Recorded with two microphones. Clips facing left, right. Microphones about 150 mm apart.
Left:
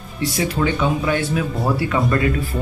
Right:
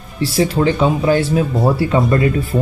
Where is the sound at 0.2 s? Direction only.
30° right (ahead or behind).